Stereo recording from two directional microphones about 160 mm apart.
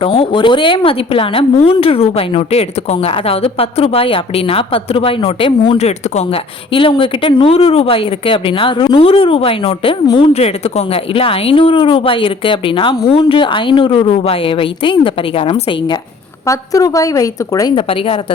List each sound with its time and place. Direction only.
0.0 s speech: 35° left (ahead or behind)
10.3 s speech: 40° left (ahead or behind)
16.5 s a woman's voice: 20° left (ahead or behind)